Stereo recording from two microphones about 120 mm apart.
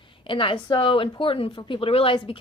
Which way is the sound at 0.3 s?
45° left (ahead or behind).